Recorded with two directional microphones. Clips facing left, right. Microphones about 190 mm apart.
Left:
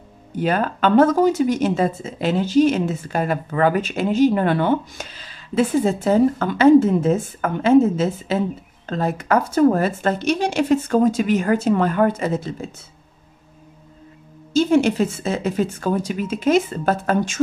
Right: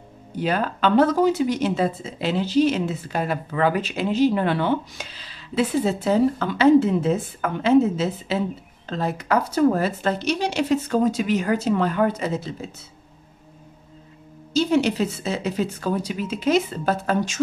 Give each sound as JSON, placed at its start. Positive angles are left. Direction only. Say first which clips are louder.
{"t": 0.4, "sound": "speech", "louder": "left 3 dB", "side_deg": 50}
{"t": 14.5, "sound": "speech", "louder": "left 4 dB", "side_deg": 50}